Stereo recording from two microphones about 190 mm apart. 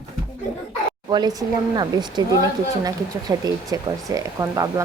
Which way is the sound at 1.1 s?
20° right (ahead or behind).